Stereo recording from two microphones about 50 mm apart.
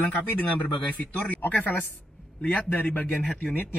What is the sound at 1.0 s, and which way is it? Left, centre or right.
Speech, left.